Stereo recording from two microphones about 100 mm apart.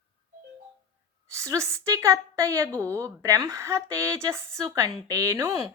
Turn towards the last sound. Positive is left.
turn(degrees=-30)  # may be behind; listen again after turning